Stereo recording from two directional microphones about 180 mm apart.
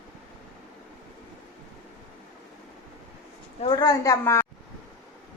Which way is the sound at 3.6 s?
20° left (ahead or behind).